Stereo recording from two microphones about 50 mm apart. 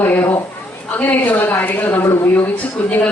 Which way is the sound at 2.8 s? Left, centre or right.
Left.